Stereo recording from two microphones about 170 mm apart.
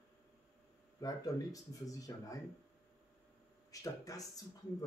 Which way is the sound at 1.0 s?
20° left (ahead or behind).